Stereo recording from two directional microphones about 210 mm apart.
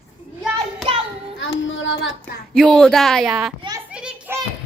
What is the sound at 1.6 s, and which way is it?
Child singing, 60° left (ahead or behind).